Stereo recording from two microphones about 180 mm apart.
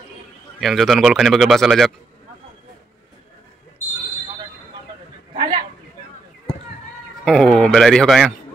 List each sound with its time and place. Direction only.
0.6 s speech: centre (ahead or behind)
5.3 s a sound: 25° right (ahead or behind)
7.2 s speech: 5° left (ahead or behind)